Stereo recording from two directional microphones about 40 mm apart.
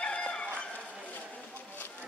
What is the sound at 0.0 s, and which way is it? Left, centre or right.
Bow-wow, left.